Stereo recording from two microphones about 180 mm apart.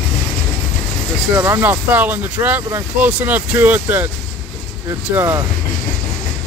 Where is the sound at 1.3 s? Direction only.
10° right (ahead or behind).